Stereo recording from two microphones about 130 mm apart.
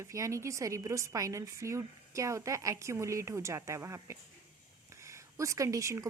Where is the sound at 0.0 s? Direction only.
25° right (ahead or behind).